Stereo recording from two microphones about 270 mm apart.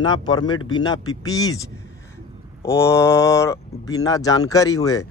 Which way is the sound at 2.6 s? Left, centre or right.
Centre.